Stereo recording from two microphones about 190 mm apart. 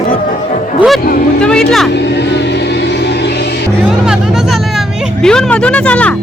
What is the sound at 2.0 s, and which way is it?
Vehicle, 65° left (ahead or behind).